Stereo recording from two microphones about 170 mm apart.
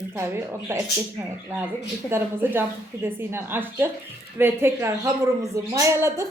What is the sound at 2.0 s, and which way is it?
A woman's voice, 15° right (ahead or behind).